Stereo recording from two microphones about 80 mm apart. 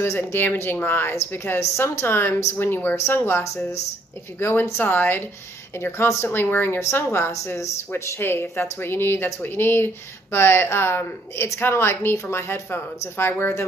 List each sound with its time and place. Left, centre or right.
0.0 s speech: left